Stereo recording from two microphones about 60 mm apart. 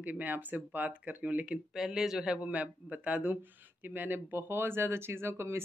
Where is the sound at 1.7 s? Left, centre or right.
Centre.